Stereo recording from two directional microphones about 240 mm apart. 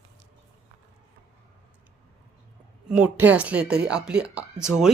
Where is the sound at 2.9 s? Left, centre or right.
Centre.